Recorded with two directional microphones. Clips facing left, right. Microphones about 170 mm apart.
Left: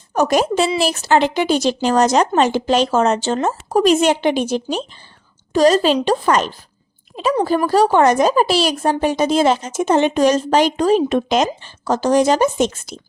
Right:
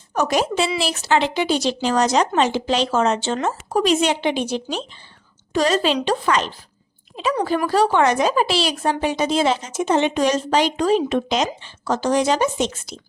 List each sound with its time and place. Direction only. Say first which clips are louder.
0.1 s a woman's voice: left 4 dB; 45° left (ahead or behind)